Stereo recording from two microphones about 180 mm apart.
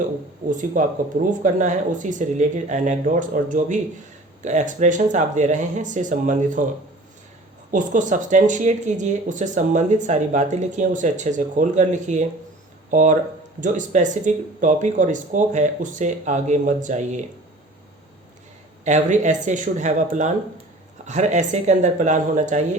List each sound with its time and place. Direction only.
0.0 s speech: 45° right (ahead or behind)
7.7 s speech: 45° right (ahead or behind)
18.9 s speech: 40° right (ahead or behind)